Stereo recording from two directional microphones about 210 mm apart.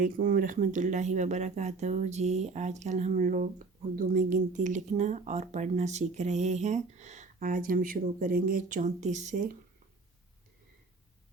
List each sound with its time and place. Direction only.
0.0 s speech: 40° right (ahead or behind)